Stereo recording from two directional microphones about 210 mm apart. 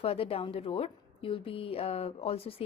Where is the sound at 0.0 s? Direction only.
30° left (ahead or behind).